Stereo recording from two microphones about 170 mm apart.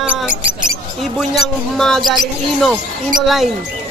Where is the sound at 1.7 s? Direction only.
Centre (ahead or behind).